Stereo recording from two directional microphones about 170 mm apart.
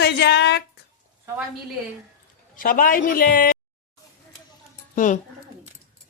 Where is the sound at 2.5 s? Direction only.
55° left (ahead or behind).